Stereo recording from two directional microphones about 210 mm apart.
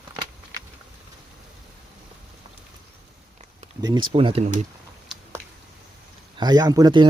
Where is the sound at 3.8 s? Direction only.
20° right (ahead or behind).